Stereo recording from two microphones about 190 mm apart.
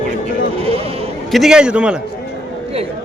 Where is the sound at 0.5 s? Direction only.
30° right (ahead or behind).